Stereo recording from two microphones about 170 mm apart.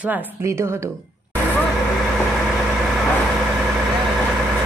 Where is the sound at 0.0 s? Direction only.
15° right (ahead or behind).